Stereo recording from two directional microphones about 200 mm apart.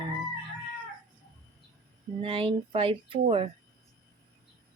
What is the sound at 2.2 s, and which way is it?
Speech, 25° right (ahead or behind).